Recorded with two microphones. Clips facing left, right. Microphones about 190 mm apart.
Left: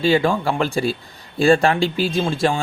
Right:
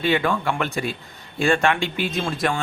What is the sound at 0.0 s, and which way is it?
Speech, 30° left (ahead or behind).